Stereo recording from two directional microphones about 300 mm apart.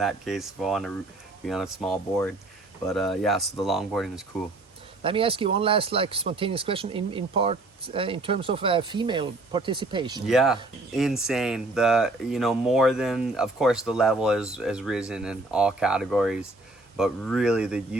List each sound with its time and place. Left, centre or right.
0.0 s speech: centre
5.0 s speech: centre
10.2 s speech: centre